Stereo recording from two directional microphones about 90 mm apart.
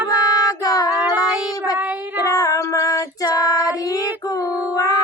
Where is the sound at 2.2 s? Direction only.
40° left (ahead or behind).